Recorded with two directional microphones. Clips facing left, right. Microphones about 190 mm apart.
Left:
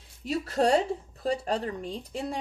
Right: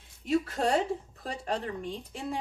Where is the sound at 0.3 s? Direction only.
40° left (ahead or behind).